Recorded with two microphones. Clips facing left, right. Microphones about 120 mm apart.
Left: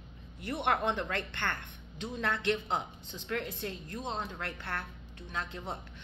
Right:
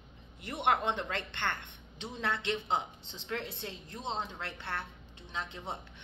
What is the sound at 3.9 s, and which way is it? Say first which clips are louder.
Speech: right 3 dB; 25° right (ahead or behind).